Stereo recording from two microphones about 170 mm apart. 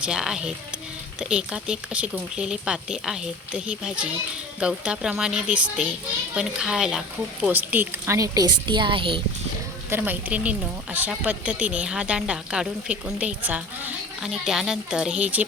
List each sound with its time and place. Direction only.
0.0 s a woman's voice: 5° right (ahead or behind); by 9.2 s 30° right (ahead or behind)
9.9 s a woman's voice: 10° right (ahead or behind)